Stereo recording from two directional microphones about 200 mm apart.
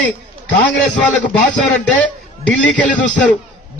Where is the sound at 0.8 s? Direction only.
5° left (ahead or behind).